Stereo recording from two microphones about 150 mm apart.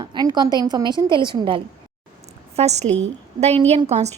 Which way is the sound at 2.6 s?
45° right (ahead or behind).